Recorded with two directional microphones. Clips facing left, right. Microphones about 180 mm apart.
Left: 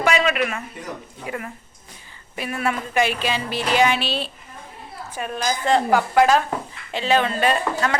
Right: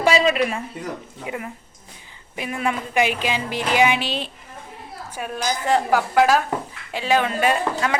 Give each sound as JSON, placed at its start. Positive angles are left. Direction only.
{"t": 0.0, "sound": "a man's voice", "side_deg": -30}
{"t": 1.2, "sound": "a woman's voice", "side_deg": -15}